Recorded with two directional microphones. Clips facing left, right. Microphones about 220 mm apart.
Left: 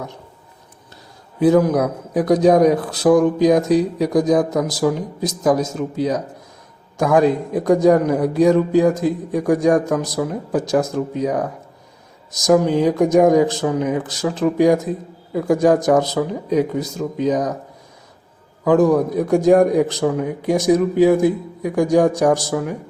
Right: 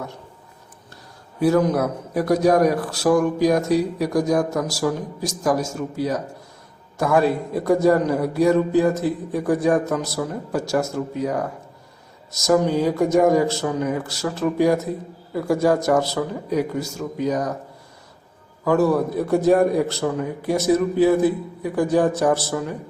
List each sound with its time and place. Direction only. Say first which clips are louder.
1.4 s a man's voice: left 4 dB; 15° left (ahead or behind)
18.6 s speech: left 4 dB; 15° left (ahead or behind)